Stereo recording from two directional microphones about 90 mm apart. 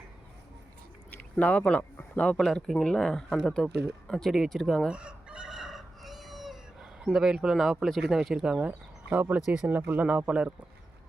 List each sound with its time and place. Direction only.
1.1 s speech: 15° left (ahead or behind)
4.1 s chicken: centre (ahead or behind)
7.0 s speech: 5° right (ahead or behind)